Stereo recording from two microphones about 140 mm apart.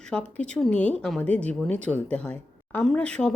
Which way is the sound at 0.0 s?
5° left (ahead or behind).